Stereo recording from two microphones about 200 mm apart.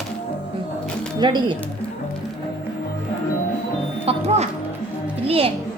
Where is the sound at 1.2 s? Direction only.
20° right (ahead or behind).